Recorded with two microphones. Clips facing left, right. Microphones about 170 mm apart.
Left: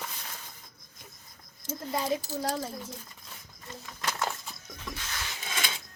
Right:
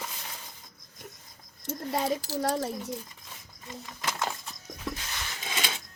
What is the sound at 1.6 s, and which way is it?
A child's voice, 80° right.